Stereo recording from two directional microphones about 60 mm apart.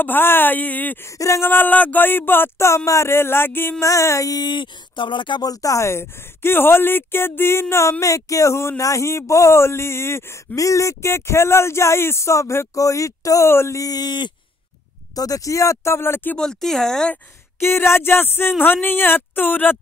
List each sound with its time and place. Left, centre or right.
0.0 s speech: left
1.0 s speech: left
1.4 s speech: left
2.6 s speech: left
3.8 s speech: left
5.4 s speech: left
8.0 s speech: left
10.5 s speech: left
13.5 s speech: left
13.7 s speech: left
15.1 s speech: left
16.3 s speech: centre
17.6 s speech: left